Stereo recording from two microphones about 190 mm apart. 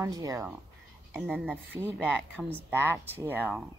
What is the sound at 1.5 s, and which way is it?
A woman's voice, 10° right (ahead or behind).